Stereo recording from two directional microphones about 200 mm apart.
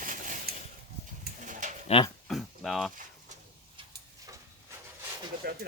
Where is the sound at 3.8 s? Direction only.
25° right (ahead or behind).